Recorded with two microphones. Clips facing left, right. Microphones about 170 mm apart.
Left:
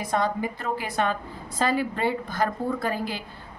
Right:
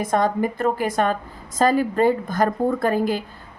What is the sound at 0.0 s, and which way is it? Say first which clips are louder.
A woman's voice: right 5 dB; 50° right (ahead or behind).